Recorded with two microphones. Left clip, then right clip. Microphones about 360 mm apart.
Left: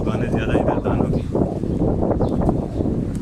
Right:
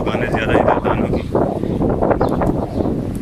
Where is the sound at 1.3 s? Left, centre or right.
Right.